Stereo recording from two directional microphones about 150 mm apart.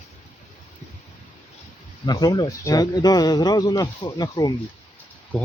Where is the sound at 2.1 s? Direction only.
25° left (ahead or behind).